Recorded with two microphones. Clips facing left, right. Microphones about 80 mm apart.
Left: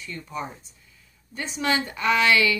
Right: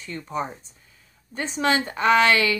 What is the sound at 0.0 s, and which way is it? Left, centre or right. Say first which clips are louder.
Speech: right 4 dB; right.